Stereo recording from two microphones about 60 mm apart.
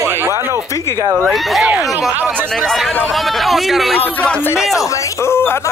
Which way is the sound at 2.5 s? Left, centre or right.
Centre.